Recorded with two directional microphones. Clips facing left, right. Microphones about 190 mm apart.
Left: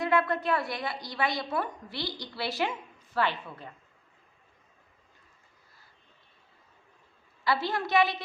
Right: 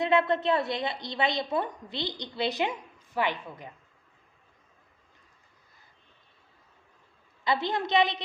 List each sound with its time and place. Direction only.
0.0 s a woman's voice: 20° right (ahead or behind)
7.4 s a woman's voice: 20° right (ahead or behind)